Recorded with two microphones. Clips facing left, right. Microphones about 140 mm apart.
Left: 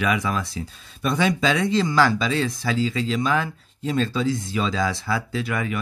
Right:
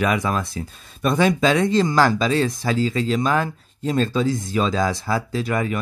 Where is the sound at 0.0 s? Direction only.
45° right (ahead or behind).